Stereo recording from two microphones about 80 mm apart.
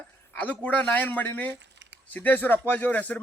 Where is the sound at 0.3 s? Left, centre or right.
Centre.